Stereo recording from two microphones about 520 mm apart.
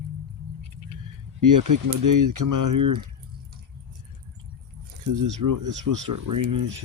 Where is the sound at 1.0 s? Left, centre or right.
Right.